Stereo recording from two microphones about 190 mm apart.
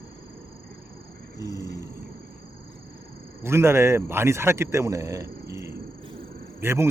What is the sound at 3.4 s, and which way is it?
Speech, 15° right (ahead or behind).